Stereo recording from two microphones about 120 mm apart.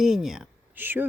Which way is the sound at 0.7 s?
15° right (ahead or behind).